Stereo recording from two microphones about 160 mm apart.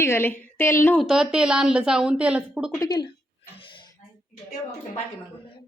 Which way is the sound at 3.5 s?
30° left (ahead or behind).